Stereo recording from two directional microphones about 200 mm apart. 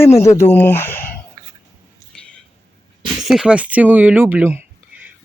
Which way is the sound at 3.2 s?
Centre (ahead or behind).